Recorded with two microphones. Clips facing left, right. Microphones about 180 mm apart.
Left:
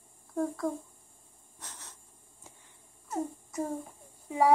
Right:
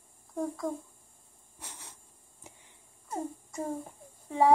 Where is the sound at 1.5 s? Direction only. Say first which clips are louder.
Right 1 dB; 10° right (ahead or behind).